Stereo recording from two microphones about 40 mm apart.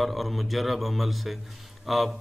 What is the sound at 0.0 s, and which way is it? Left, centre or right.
A man's voice, centre.